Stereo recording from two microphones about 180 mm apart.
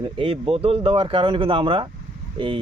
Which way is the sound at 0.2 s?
30° right (ahead or behind).